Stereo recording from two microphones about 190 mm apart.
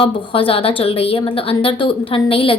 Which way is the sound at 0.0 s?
30° left (ahead or behind).